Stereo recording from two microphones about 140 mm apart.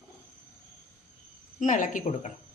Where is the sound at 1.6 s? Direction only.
70° left (ahead or behind).